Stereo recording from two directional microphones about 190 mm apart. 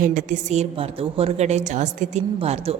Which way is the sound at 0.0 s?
45° right (ahead or behind).